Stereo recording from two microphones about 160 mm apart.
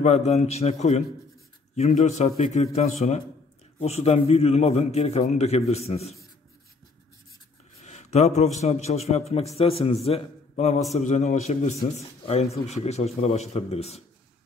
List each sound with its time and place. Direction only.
0.0 s a man's voice: 45° left (ahead or behind)
7.8 s a sound: 45° left (ahead or behind)
8.5 s a man's voice: 45° left (ahead or behind)